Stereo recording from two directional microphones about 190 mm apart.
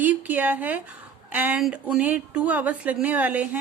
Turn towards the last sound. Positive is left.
turn(degrees=-10)  # may be behind; listen again after turning